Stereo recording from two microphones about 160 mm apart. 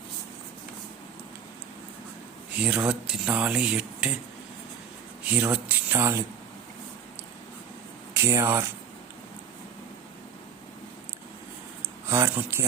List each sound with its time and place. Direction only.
2.6 s speech: 5° right (ahead or behind)
5.2 s speech: 10° right (ahead or behind)
8.1 s speech: 15° right (ahead or behind)
12.0 s speech: 15° right (ahead or behind)